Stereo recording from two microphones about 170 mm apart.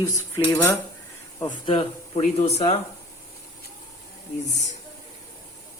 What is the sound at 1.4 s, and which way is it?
Speech, 25° left (ahead or behind).